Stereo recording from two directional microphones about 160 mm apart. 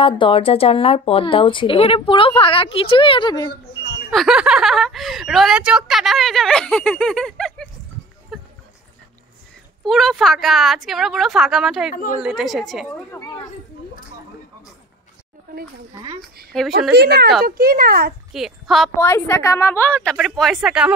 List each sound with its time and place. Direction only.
0.0 s speech: 35° left (ahead or behind)
3.8 s a sound: 90° left
4.1 s a woman's voice: centre (ahead or behind)
8.3 s a sound: centre (ahead or behind)
9.8 s a woman's voice: centre (ahead or behind)
11.9 s speech: 60° left (ahead or behind)
12.2 s a woman's voice: 5° right (ahead or behind)
13.1 s speech: 20° left (ahead or behind)
16.5 s a woman's voice: centre (ahead or behind)
16.9 s speech: 85° right
17.5 s speech: 65° right (ahead or behind)
18.3 s a woman's voice: centre (ahead or behind)
18.9 s a woman's voice: 15° left (ahead or behind); by 20.9 s 5° right (ahead or behind)